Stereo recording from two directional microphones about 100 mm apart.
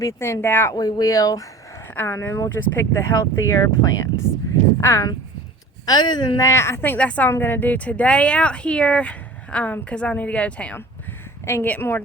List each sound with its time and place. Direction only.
0.0 s speech: 30° left (ahead or behind)
0.7 s a woman's voice: 40° left (ahead or behind)
2.0 s a woman's voice: 20° left (ahead or behind)
5.8 s a woman's voice: 45° left (ahead or behind); by 7.3 s 15° left (ahead or behind)
7.3 s speech: 25° left (ahead or behind)